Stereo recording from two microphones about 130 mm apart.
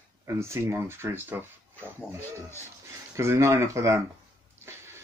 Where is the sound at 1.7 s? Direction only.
15° left (ahead or behind).